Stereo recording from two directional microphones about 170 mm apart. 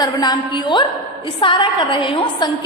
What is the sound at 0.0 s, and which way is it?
A woman's voice, 25° left (ahead or behind).